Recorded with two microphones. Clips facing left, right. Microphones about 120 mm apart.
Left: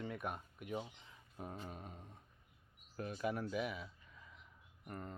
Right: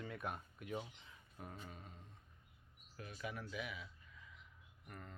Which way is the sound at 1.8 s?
45° left (ahead or behind).